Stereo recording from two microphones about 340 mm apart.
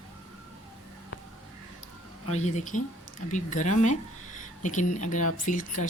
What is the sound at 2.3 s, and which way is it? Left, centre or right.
Speech, left.